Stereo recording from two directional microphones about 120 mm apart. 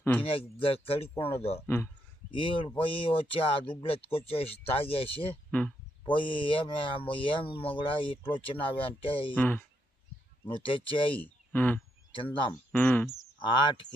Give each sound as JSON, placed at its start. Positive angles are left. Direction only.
{"t": 0.0, "sound": "speech", "side_deg": 15}
{"t": 0.3, "sound": "speech", "side_deg": 50}
{"t": 1.6, "sound": "speech", "side_deg": 15}
{"t": 2.3, "sound": "speech", "side_deg": 45}
{"t": 5.3, "sound": "a sound", "side_deg": 10}
{"t": 6.1, "sound": "speech", "side_deg": 45}
{"t": 9.3, "sound": "speech", "side_deg": 15}
{"t": 10.4, "sound": "speech", "side_deg": 45}
{"t": 11.1, "sound": "speech", "side_deg": 15}
{"t": 12.1, "sound": "speech", "side_deg": 45}
{"t": 12.7, "sound": "speech", "side_deg": 15}
{"t": 13.4, "sound": "speech", "side_deg": 40}